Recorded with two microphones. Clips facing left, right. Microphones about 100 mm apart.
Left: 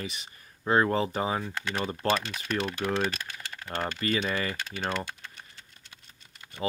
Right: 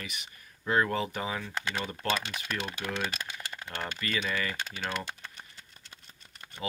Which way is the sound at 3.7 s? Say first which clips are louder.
Left 6 dB; 30° left (ahead or behind).